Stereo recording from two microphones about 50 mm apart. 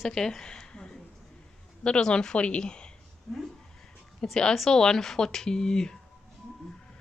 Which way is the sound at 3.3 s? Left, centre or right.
Centre.